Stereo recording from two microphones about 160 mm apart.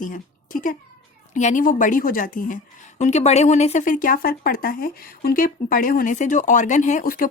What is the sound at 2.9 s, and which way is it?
Speech, 45° left (ahead or behind).